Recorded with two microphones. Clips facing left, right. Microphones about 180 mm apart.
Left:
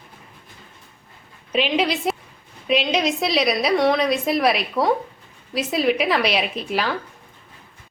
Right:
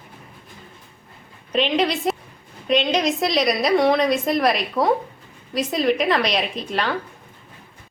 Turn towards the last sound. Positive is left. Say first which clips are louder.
# even
turn(degrees=5)  # may be behind; listen again after turning